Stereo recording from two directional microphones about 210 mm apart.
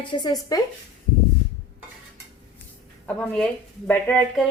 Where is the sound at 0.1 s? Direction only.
20° left (ahead or behind).